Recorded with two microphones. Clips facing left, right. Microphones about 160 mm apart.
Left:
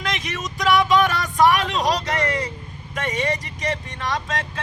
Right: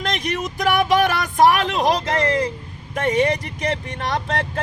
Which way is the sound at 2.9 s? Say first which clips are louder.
Right 6 dB; 55° right (ahead or behind).